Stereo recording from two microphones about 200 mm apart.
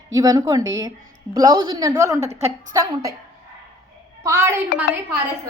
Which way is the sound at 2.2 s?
30° right (ahead or behind).